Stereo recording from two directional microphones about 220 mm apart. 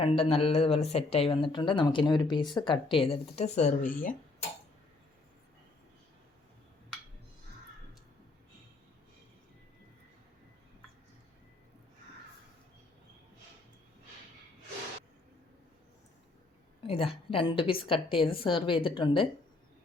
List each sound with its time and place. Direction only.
0.0 s speech: 25° left (ahead or behind)
16.8 s speech: 25° left (ahead or behind)